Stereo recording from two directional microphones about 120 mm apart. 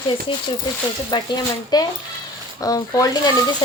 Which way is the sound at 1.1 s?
35° left (ahead or behind).